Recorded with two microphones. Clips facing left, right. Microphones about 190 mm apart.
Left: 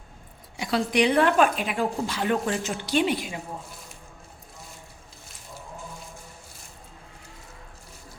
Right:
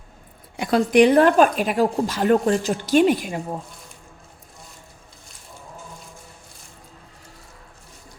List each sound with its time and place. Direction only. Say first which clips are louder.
0.5 s a woman's voice: right 6 dB; 55° right (ahead or behind)
0.9 s a woman's voice: right 6 dB; 45° right (ahead or behind)